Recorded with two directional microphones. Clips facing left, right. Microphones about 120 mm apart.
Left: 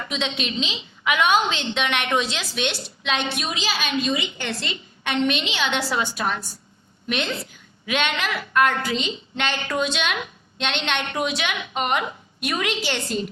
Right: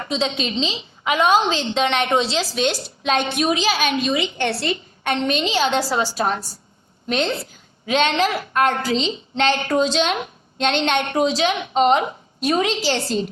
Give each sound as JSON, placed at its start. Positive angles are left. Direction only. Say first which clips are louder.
{"t": 0.1, "sound": "a woman's voice", "louder": "right 5 dB", "side_deg": -35}
{"t": 4.7, "sound": "a woman's voice", "louder": "right 4 dB", "side_deg": -40}